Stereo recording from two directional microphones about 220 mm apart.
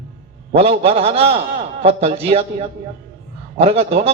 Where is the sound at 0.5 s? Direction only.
25° right (ahead or behind).